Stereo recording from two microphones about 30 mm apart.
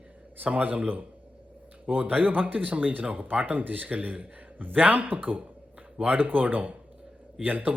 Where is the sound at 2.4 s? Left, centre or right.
Right.